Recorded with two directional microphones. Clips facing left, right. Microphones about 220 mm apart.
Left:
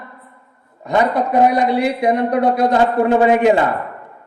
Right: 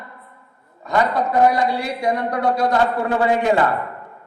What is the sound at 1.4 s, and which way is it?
A man's voice, 20° left (ahead or behind).